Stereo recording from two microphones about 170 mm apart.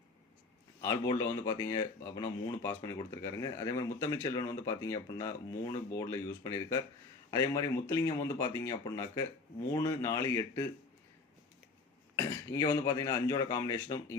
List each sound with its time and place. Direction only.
0.8 s speech: 20° left (ahead or behind)
12.1 s speech: 20° left (ahead or behind)